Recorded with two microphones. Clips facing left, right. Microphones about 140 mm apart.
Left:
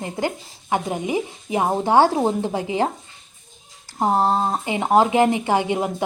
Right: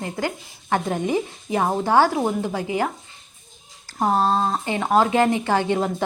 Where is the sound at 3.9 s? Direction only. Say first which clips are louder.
Left 1 dB; 20° left (ahead or behind).